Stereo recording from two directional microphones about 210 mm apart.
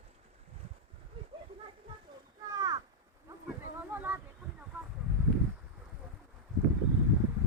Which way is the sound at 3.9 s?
10° right (ahead or behind).